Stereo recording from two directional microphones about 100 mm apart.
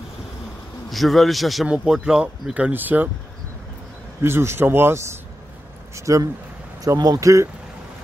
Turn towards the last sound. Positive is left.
turn(degrees=-35)  # may be behind; listen again after turning